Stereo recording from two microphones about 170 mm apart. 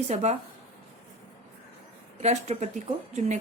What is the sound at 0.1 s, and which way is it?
Speech, 40° right (ahead or behind).